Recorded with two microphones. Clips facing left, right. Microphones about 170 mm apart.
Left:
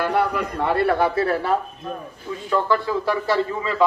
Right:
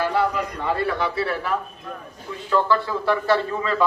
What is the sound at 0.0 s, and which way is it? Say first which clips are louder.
A man's voice: left 1 dB; 60° left (ahead or behind).